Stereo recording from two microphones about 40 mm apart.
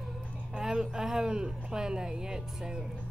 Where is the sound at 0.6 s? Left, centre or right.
Centre.